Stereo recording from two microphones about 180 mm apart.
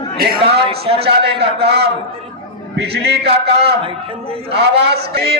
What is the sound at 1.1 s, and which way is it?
A man's voice, 70° right (ahead or behind).